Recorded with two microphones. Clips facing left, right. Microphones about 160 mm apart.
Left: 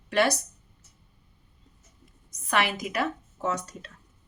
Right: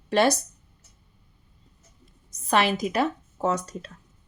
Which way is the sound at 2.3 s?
30° right (ahead or behind).